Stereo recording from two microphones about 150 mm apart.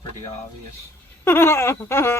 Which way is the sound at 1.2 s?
15° left (ahead or behind).